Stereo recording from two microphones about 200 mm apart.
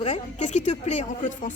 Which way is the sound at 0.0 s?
35° left (ahead or behind).